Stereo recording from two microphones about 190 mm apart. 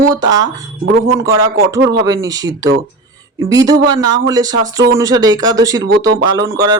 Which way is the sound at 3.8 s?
20° right (ahead or behind).